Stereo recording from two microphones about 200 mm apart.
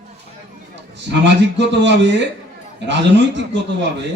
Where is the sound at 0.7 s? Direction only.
60° right (ahead or behind).